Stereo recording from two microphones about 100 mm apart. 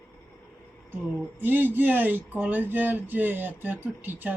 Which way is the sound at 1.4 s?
20° right (ahead or behind).